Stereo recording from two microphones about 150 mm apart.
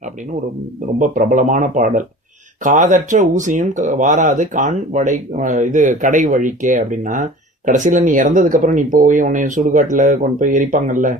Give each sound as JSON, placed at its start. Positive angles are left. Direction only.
{"t": 0.9, "sound": "speech", "side_deg": -60}